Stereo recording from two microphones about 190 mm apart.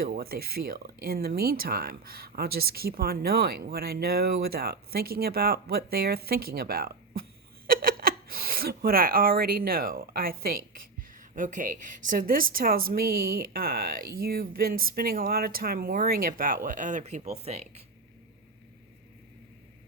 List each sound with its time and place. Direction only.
0.0 s speech: 50° right (ahead or behind); by 17.8 s 35° right (ahead or behind)